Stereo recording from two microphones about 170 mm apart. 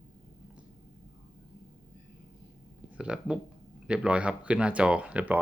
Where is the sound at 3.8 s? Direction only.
5° right (ahead or behind).